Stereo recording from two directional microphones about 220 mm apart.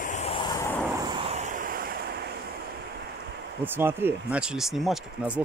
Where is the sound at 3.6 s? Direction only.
10° right (ahead or behind).